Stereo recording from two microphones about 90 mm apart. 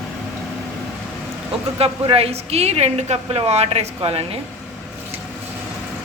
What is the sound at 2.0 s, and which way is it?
Speech, 90° right.